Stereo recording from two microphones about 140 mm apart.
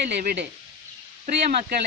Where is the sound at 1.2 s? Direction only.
70° right (ahead or behind).